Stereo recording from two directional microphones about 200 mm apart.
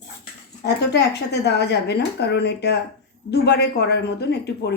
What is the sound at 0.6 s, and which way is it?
Speech, 55° left (ahead or behind).